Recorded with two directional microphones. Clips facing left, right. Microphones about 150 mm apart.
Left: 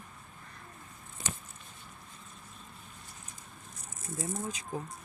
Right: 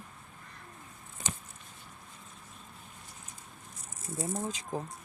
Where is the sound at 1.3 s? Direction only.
20° right (ahead or behind).